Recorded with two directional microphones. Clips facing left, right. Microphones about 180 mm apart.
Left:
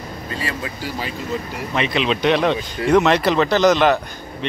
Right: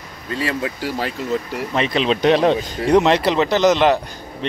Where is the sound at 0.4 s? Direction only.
65° right (ahead or behind).